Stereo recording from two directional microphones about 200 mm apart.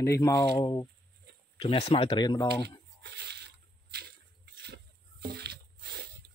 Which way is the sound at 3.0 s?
60° right (ahead or behind).